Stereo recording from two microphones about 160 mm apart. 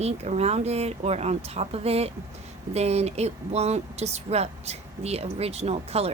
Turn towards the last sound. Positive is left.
turn(degrees=-40)  # may be behind; listen again after turning